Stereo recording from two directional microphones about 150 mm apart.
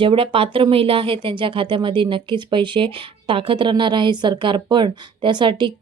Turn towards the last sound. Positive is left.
turn(degrees=-30)  # may be behind; listen again after turning